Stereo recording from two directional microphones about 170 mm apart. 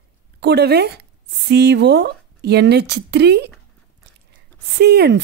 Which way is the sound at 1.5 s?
85° right.